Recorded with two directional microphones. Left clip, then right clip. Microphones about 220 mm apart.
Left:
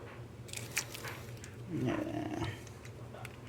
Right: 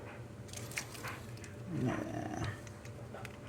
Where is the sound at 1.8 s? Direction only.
Centre (ahead or behind).